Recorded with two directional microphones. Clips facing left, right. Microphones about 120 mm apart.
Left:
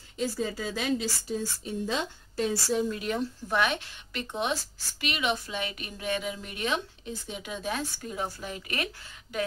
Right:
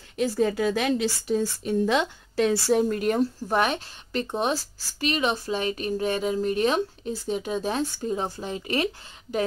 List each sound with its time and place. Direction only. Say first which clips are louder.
0.2 s a woman's voice: right 8 dB; 65° right (ahead or behind); by 8.8 s 30° right (ahead or behind)